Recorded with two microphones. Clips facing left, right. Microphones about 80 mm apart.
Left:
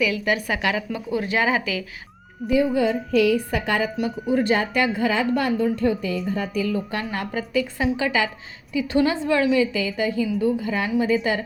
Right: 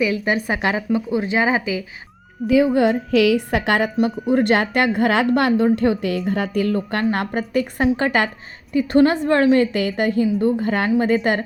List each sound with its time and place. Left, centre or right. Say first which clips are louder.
0.0 s a woman's voice: right 2 dB; right
2.7 s a woman's voice: right 4 dB; right
3.1 s a woman's voice: right 3 dB; right
3.9 s a woman's voice: right 4 dB; right